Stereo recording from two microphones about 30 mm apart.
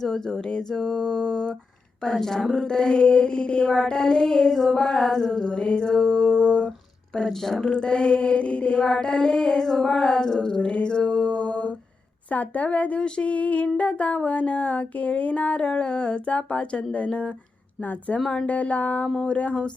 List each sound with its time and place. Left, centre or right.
0.0 s female singing: centre
2.0 s female singing: centre
2.6 s female singing: left
4.5 s female singing: centre; by 6.7 s left
7.3 s female singing: centre
7.6 s a sound: left
8.8 s female singing: left
9.6 s female singing: centre
9.9 s female singing: left
10.8 s music: left
12.3 s a sound: left
15.5 s a sound: left
18.4 s a sound: left